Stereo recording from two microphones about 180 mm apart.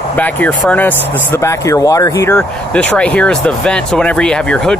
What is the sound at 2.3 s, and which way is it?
Speech, 5° left (ahead or behind).